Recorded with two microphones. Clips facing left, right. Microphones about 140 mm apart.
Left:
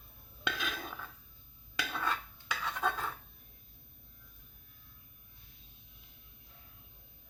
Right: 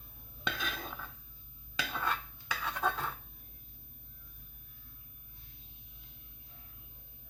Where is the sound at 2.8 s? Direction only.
10° right (ahead or behind).